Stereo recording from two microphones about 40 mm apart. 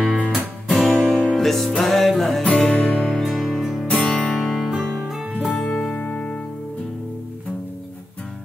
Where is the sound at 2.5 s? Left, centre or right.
Left.